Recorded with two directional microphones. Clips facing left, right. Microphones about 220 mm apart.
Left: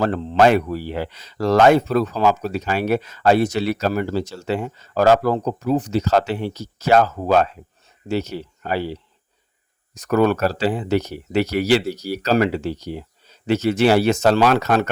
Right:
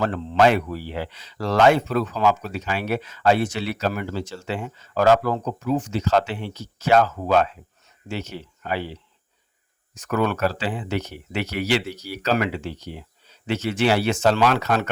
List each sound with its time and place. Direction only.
0.0 s speech: 40° left (ahead or behind)